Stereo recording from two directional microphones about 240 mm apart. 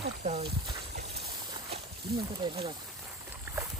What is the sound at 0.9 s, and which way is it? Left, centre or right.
Boat, right.